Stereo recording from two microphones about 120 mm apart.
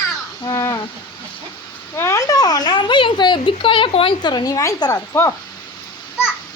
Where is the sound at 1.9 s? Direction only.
25° left (ahead or behind).